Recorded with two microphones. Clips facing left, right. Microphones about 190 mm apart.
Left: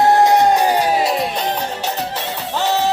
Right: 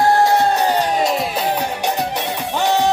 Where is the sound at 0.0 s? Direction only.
20° left (ahead or behind).